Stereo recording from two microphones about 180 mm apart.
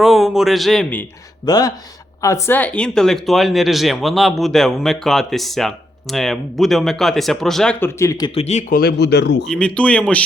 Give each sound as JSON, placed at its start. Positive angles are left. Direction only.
{"t": 0.0, "sound": "speech", "side_deg": 0}
{"t": 1.5, "sound": "speech", "side_deg": 20}
{"t": 8.4, "sound": "speech", "side_deg": 40}
{"t": 8.7, "sound": "speech", "side_deg": 60}
{"t": 9.5, "sound": "speech", "side_deg": 5}